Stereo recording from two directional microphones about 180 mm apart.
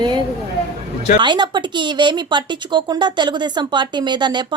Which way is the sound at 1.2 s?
25° right (ahead or behind).